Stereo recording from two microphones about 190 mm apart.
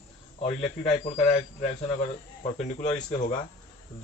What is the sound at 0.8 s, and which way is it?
Speech, 30° left (ahead or behind).